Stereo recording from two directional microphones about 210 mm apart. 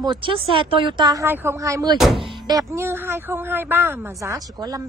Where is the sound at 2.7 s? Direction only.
10° right (ahead or behind).